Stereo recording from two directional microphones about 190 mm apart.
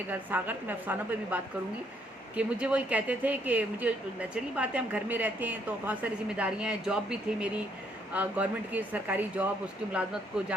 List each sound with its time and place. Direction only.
0.1 s speech: 10° right (ahead or behind)